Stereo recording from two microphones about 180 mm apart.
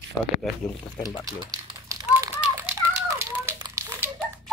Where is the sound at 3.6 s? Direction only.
20° right (ahead or behind).